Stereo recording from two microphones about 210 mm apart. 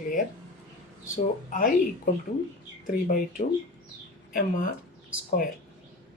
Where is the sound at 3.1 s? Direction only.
45° left (ahead or behind).